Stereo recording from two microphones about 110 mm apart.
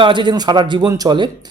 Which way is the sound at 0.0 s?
45° right (ahead or behind).